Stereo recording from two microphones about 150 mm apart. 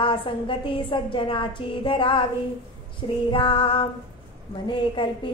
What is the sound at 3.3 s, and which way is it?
A woman's voice, 35° left (ahead or behind).